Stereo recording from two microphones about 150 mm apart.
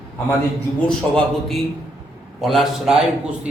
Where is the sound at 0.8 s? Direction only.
5° left (ahead or behind).